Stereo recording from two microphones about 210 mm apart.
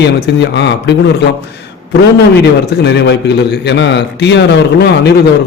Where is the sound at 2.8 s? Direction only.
55° left (ahead or behind).